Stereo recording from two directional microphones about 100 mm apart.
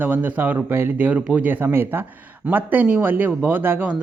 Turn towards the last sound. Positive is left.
turn(degrees=-20)  # may be behind; listen again after turning